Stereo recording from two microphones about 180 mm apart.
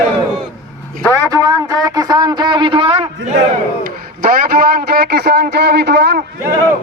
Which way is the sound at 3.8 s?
50° right (ahead or behind).